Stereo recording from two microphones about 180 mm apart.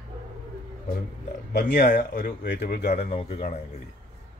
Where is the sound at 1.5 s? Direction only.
50° left (ahead or behind); by 3.4 s 35° left (ahead or behind).